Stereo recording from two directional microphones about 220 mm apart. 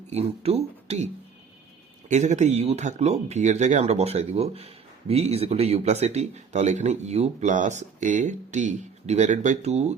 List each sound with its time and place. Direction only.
0.1 s speech: 30° right (ahead or behind)